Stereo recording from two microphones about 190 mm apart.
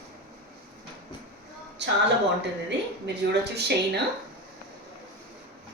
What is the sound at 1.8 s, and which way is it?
Speech, 65° right (ahead or behind).